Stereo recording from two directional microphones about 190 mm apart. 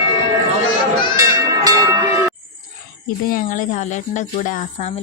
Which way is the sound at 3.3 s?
45° left (ahead or behind).